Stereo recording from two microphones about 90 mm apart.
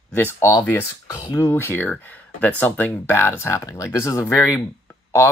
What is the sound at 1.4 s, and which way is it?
Speech, 25° left (ahead or behind).